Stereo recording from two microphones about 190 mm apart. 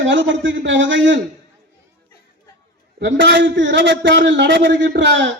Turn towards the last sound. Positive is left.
turn(degrees=-70)  # may be behind; listen again after turning